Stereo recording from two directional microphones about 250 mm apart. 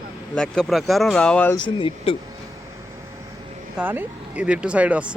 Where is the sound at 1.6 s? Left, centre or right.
Centre.